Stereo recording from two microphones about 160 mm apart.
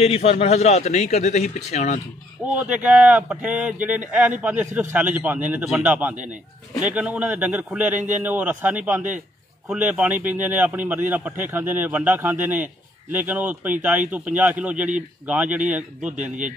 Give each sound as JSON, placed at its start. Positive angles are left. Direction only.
{"t": 0.0, "sound": "a man's voice", "side_deg": 40}
{"t": 2.6, "sound": "speech", "side_deg": -10}